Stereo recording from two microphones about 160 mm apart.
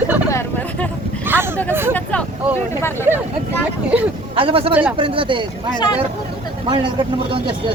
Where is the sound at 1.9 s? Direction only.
10° left (ahead or behind).